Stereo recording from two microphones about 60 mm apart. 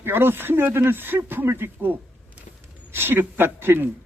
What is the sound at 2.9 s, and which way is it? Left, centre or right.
Speech, right.